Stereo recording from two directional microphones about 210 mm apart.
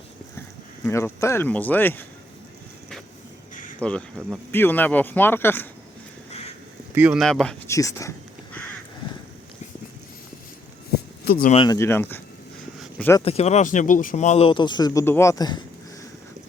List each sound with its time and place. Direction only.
0.9 s speech: 15° left (ahead or behind)
3.8 s speech: 5° left (ahead or behind)
6.9 s speech: 5° right (ahead or behind)
7.7 s speech: 15° left (ahead or behind)
11.4 s speech: 25° left (ahead or behind)
13.2 s speech: 30° left (ahead or behind)